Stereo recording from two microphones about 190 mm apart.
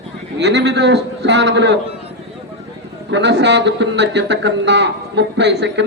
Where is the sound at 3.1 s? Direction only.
65° right (ahead or behind).